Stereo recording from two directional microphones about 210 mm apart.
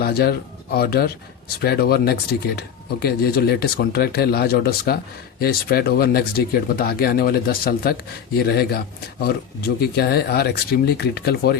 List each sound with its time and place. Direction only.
0.0 s speech: 50° left (ahead or behind)